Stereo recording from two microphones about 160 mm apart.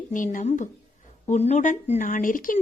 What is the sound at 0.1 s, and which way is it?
A woman's voice, 55° left (ahead or behind).